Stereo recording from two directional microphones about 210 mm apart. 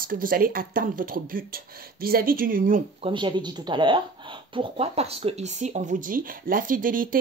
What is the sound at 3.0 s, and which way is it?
Speech, 20° right (ahead or behind).